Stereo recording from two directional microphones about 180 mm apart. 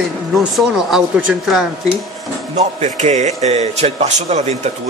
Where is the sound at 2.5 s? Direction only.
40° right (ahead or behind).